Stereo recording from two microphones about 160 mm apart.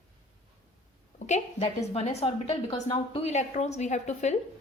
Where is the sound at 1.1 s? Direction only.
45° left (ahead or behind).